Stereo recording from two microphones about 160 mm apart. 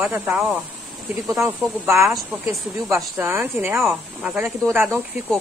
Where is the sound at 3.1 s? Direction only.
15° right (ahead or behind).